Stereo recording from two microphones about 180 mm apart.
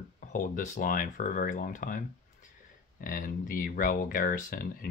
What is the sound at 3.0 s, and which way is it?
Speech, 50° left (ahead or behind).